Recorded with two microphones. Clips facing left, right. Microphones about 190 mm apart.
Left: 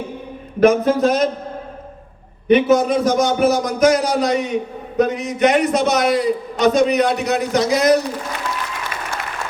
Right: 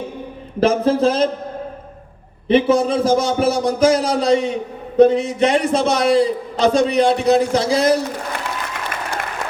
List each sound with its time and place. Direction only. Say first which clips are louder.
0.6 s a man's voice: left 1 dB; 30° right (ahead or behind)
2.5 s a man's voice: left 1 dB; 30° right (ahead or behind)